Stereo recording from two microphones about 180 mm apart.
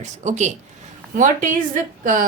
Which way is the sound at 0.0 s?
40° right (ahead or behind).